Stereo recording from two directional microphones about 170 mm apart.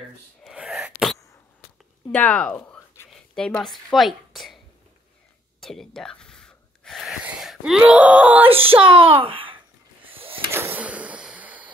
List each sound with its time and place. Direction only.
0.4 s sneeze: centre (ahead or behind)
2.1 s speech: 5° left (ahead or behind)
5.6 s gasp: centre (ahead or behind)
8.5 s a child's voice: 35° right (ahead or behind)
10.0 s a sound: 30° right (ahead or behind)
10.5 s a sound: 10° right (ahead or behind)